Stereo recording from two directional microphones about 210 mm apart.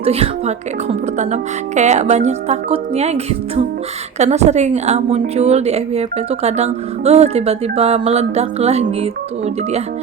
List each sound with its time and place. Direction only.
0.0 s a woman's voice: 30° right (ahead or behind)